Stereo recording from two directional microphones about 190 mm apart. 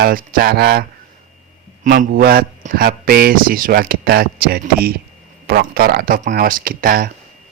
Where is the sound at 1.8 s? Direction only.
50° right (ahead or behind).